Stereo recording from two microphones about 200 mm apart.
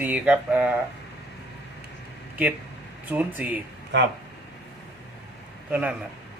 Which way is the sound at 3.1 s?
10° right (ahead or behind).